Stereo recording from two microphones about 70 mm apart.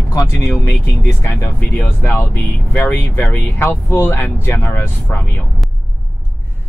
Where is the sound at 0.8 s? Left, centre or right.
Left.